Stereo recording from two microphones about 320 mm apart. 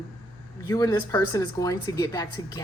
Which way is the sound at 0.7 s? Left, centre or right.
Centre.